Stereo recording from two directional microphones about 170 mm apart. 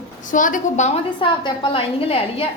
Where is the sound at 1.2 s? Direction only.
30° left (ahead or behind).